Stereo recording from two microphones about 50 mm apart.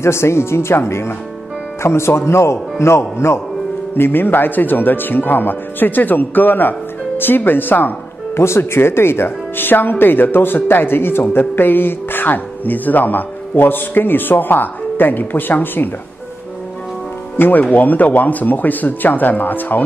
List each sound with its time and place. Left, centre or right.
0.0 s speech: left
3.9 s speech: left
8.4 s speech: left
17.4 s speech: left